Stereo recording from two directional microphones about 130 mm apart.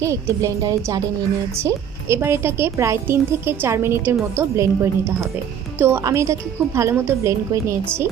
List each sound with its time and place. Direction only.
0.0 s a woman's voice: 20° right (ahead or behind)